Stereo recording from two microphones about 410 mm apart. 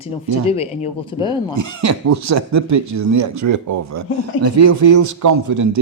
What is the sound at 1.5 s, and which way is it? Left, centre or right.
A man's voice, right.